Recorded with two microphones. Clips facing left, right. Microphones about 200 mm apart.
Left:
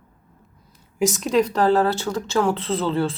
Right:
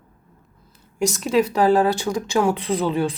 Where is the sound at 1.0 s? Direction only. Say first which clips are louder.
Even; centre (ahead or behind).